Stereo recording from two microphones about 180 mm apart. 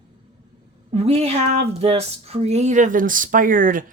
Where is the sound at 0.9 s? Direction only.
35° right (ahead or behind).